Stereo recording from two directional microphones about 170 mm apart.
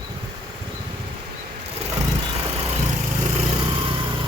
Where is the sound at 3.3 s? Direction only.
30° right (ahead or behind).